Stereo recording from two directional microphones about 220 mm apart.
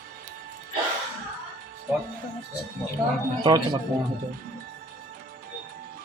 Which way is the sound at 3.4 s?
20° right (ahead or behind).